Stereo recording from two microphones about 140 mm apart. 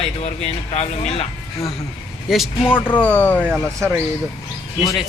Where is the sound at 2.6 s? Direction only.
15° left (ahead or behind).